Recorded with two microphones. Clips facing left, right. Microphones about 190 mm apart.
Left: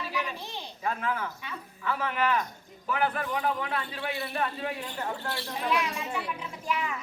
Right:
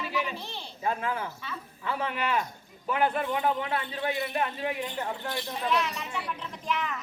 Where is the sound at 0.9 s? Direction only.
25° right (ahead or behind).